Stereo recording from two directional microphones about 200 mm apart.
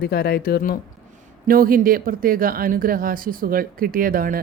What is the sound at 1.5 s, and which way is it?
Speech, 45° right (ahead or behind).